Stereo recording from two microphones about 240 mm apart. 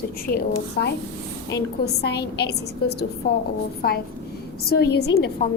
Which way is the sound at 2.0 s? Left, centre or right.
Left.